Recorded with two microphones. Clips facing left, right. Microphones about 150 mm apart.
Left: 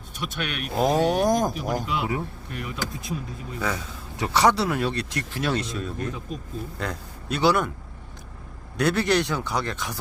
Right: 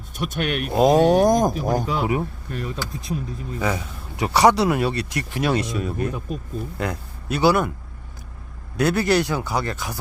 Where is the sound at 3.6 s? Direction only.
10° right (ahead or behind).